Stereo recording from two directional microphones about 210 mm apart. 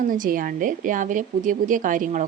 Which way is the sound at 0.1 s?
40° right (ahead or behind).